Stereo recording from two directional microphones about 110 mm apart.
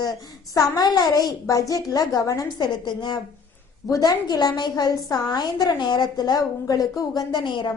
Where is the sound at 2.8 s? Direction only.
45° left (ahead or behind).